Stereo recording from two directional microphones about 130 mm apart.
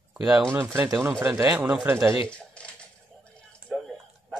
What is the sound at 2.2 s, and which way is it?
Typing, 10° left (ahead or behind).